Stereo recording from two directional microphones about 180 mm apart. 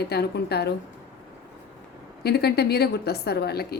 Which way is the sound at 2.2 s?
60° left (ahead or behind).